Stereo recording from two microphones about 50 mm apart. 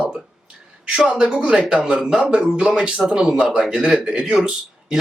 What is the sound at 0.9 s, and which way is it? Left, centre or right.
Speech, centre.